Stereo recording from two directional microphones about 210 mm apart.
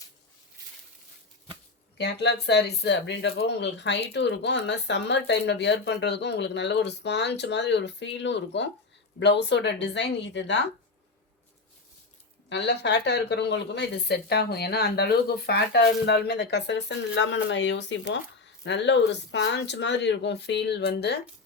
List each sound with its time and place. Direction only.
2.0 s speech: 55° left (ahead or behind)
12.5 s speech: 55° left (ahead or behind)